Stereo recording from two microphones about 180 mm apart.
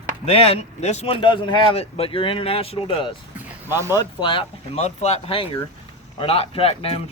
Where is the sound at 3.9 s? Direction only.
25° left (ahead or behind).